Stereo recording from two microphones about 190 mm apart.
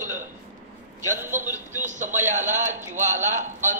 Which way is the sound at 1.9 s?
40° right (ahead or behind).